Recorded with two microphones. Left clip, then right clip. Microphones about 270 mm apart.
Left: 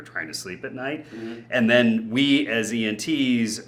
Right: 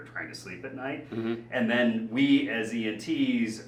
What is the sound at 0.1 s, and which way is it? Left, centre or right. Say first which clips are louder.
Speech: left 7 dB; left.